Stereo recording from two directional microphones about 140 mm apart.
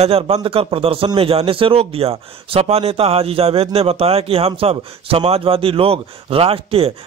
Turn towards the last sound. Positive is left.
turn(degrees=-45)  # may be behind; listen again after turning